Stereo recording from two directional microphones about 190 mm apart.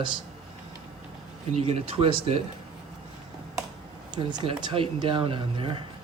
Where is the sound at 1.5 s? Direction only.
30° right (ahead or behind).